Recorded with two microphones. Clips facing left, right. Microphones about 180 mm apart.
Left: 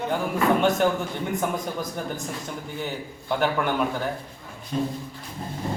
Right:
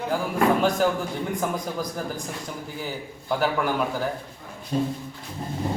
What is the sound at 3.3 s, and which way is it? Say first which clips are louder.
Speech: even; 5° right (ahead or behind).